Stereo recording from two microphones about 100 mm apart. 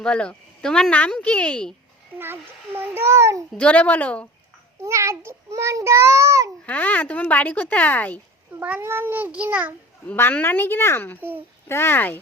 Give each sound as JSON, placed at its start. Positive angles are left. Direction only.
{"t": 0.0, "sound": "speech", "side_deg": 10}
{"t": 2.1, "sound": "child singing", "side_deg": -20}
{"t": 3.5, "sound": "speech", "side_deg": 10}
{"t": 4.8, "sound": "child singing", "side_deg": -30}
{"t": 6.7, "sound": "speech", "side_deg": 15}
{"t": 8.5, "sound": "a child's voice", "side_deg": -15}
{"t": 8.8, "sound": "child singing", "side_deg": -20}
{"t": 10.1, "sound": "a woman's voice", "side_deg": 15}
{"t": 11.2, "sound": "child singing", "side_deg": -20}
{"t": 11.7, "sound": "a woman's voice", "side_deg": 25}